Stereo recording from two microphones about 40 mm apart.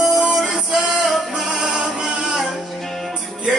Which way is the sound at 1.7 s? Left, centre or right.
Centre.